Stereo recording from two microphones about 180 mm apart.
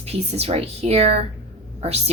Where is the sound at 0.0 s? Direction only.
35° right (ahead or behind).